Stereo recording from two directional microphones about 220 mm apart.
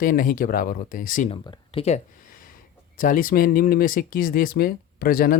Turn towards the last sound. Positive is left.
turn(degrees=40)  # may be behind; listen again after turning